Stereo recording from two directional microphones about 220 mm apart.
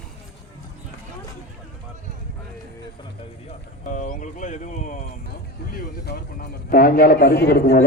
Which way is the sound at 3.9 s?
35° left (ahead or behind).